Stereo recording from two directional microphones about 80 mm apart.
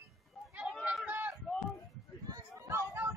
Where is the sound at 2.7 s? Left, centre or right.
Right.